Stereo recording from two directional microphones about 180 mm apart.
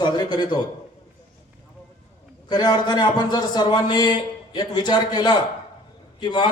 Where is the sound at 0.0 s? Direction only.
25° left (ahead or behind).